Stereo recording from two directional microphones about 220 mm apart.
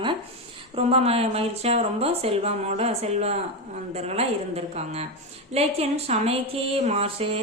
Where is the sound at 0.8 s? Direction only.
25° right (ahead or behind).